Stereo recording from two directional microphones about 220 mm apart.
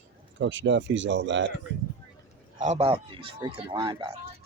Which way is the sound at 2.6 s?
30° right (ahead or behind).